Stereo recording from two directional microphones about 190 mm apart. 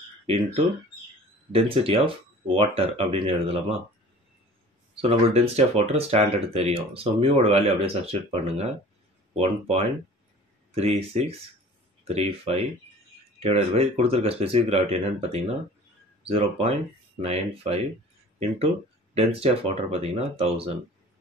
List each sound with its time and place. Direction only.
1.5 s speech: 30° right (ahead or behind)
4.9 s speech: 30° right (ahead or behind)
19.1 s speech: 30° right (ahead or behind)